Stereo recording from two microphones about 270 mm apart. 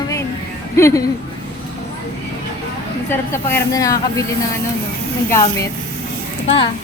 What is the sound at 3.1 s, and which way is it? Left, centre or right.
A woman's voice, centre.